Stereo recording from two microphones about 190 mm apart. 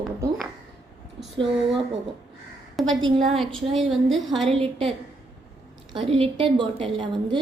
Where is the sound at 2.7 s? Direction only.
Centre (ahead or behind).